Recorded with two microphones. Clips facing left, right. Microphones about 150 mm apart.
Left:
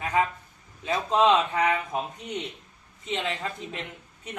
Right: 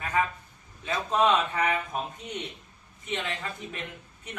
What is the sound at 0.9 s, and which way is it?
Speech, 25° left (ahead or behind).